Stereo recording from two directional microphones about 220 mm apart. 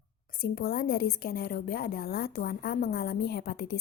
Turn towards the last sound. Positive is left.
turn(degrees=45)  # may be behind; listen again after turning